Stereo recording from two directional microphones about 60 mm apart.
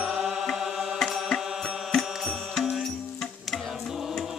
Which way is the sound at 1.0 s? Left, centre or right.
Centre.